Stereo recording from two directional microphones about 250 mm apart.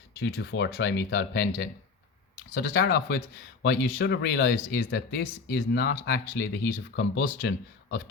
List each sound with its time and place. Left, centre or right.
0.2 s speech: left